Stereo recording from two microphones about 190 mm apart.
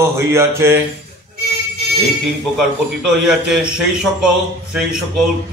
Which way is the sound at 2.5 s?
5° right (ahead or behind).